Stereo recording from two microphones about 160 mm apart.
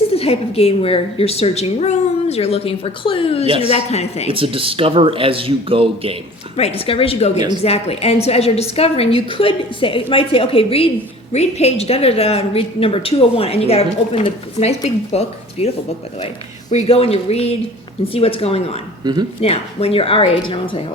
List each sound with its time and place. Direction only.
0.1 s a woman's voice: 40° left (ahead or behind)
3.4 s speech: 35° right (ahead or behind)
3.7 s a woman's voice: 40° left (ahead or behind)
4.3 s speech: 35° right (ahead or behind)
6.6 s a woman's voice: 40° left (ahead or behind)
7.3 s a woman's voice: 25° right (ahead or behind)
7.6 s a woman's voice: 40° left (ahead or behind)
19.1 s a woman's voice: 25° right (ahead or behind)
19.4 s a woman's voice: 40° left (ahead or behind)